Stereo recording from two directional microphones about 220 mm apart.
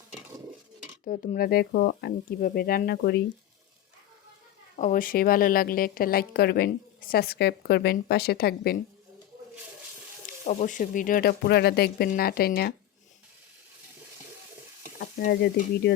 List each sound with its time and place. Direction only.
0.1 s a sound: 10° right (ahead or behind)
1.0 s a woman's voice: 40° left (ahead or behind)
4.8 s a woman's voice: 35° left (ahead or behind)
10.4 s a woman's voice: 35° left (ahead or behind)
14.9 s speech: 45° left (ahead or behind)